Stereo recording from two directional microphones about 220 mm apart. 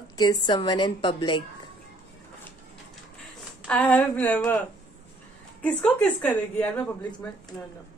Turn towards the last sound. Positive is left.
turn(degrees=20)  # may be behind; listen again after turning